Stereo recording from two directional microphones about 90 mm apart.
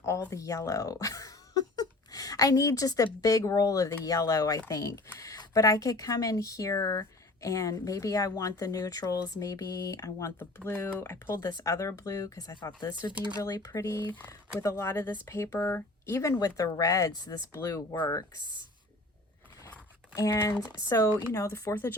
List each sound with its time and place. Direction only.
0.0 s speech: 35° left (ahead or behind)
10.7 s speech: 25° left (ahead or behind)
16.4 s speech: 40° left (ahead or behind)
17.5 s speech: 30° left (ahead or behind)
20.1 s speech: 40° left (ahead or behind)
20.4 s speech: 30° left (ahead or behind)